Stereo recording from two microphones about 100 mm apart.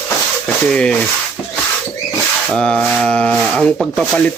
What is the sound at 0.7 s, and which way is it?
Speech, 10° left (ahead or behind).